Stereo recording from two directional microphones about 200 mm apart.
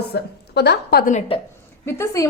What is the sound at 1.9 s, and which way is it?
Speech, 15° left (ahead or behind).